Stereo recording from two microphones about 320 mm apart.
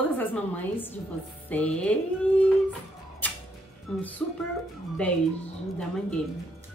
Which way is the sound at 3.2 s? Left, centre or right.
Centre.